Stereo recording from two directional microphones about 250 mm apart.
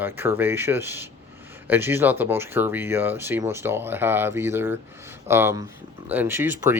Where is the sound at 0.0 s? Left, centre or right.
Centre.